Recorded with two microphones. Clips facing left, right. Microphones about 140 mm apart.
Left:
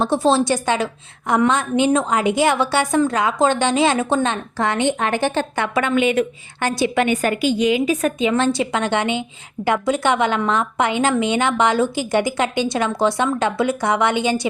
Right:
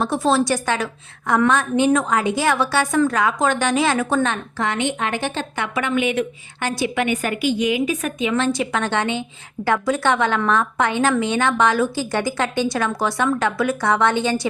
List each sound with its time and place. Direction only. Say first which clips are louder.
0.0 s a woman's voice: left 2 dB; 30° left (ahead or behind)
4.6 s a woman's voice: left 3 dB; 35° left (ahead or behind)
7.7 s a woman's voice: left 3 dB; 30° left (ahead or behind)
8.7 s a woman's voice: left 2 dB; 15° left (ahead or behind)